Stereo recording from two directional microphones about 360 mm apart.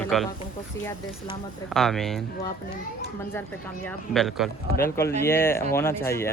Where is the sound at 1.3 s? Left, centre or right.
Centre.